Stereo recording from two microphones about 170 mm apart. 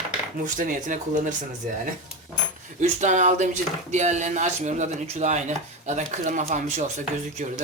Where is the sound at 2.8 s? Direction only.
45° right (ahead or behind).